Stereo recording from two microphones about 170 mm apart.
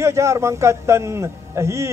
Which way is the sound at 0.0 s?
15° right (ahead or behind).